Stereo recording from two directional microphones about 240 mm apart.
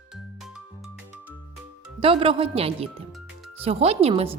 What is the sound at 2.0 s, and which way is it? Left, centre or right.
A woman's voice, right.